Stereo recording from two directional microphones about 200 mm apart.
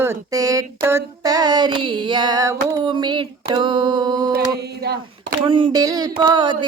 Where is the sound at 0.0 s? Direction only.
15° right (ahead or behind).